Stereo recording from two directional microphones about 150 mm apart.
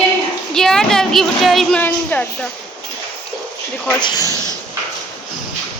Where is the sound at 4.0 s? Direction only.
30° left (ahead or behind).